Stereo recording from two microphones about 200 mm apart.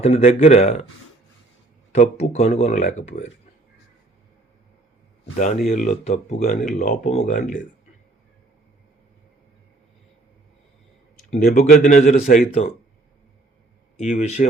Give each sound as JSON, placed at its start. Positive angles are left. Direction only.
{"t": 0.0, "sound": "speech", "side_deg": 30}
{"t": 1.9, "sound": "speech", "side_deg": 35}
{"t": 5.6, "sound": "speech", "side_deg": 35}
{"t": 11.3, "sound": "speech", "side_deg": 45}
{"t": 14.0, "sound": "speech", "side_deg": 35}